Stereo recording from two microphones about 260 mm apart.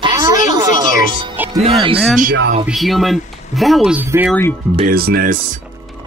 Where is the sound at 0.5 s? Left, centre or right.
Centre.